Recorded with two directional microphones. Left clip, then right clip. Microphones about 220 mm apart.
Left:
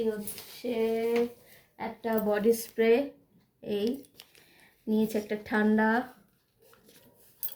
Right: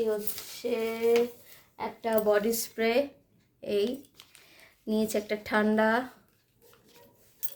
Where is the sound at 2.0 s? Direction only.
45° right (ahead or behind).